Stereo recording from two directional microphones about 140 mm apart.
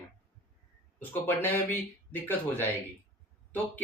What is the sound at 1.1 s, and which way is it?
Speech, 15° left (ahead or behind).